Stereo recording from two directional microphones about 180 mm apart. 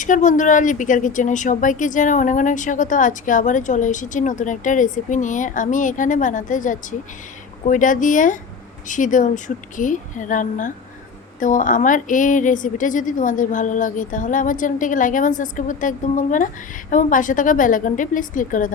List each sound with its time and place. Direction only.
0.0 s a woman's voice: 45° left (ahead or behind)